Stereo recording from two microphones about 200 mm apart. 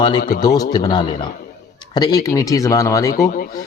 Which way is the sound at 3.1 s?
45° left (ahead or behind).